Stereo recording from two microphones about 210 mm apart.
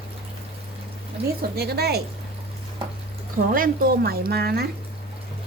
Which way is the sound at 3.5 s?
45° right (ahead or behind).